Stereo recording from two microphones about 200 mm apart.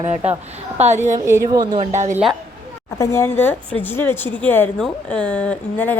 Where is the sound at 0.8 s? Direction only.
35° right (ahead or behind).